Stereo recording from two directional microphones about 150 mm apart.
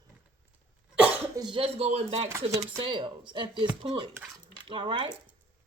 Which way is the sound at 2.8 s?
35° right (ahead or behind).